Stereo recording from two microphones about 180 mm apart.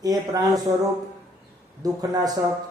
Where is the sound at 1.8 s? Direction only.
20° right (ahead or behind).